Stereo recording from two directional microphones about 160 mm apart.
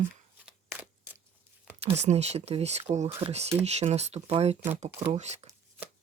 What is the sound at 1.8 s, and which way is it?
Speech, 45° right (ahead or behind).